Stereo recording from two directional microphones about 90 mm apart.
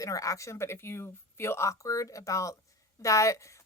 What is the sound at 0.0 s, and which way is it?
Speech, 40° left (ahead or behind).